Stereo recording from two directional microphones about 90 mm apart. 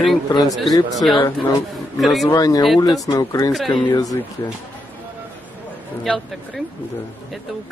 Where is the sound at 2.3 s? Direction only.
45° left (ahead or behind).